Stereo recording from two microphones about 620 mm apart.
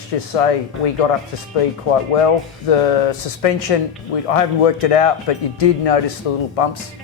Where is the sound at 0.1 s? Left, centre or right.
Left.